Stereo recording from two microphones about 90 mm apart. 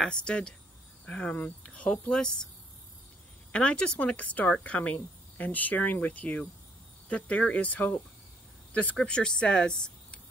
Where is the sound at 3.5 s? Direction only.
10° left (ahead or behind).